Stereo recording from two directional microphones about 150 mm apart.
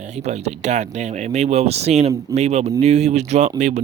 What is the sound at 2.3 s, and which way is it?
Speech, 45° right (ahead or behind).